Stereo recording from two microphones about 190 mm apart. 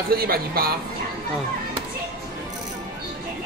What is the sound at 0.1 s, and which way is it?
Speech, 50° right (ahead or behind).